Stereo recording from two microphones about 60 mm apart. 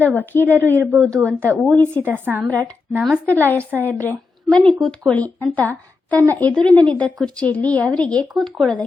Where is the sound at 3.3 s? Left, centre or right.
Left.